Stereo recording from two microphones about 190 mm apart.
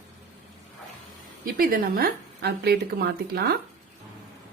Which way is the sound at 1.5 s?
50° right (ahead or behind).